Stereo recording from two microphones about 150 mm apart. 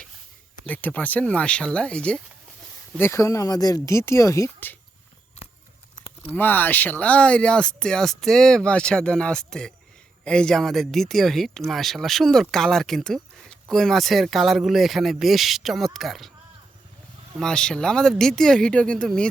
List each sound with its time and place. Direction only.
0.6 s speech: 10° left (ahead or behind)
3.0 s speech: 20° left (ahead or behind)
6.3 s speech: 10° left (ahead or behind)
17.3 s speech: 5° left (ahead or behind)